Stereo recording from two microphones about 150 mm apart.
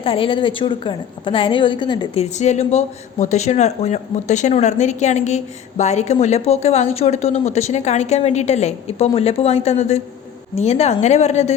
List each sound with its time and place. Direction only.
0.0 s a woman's voice: 35° left (ahead or behind)
2.3 s speech: 50° left (ahead or behind)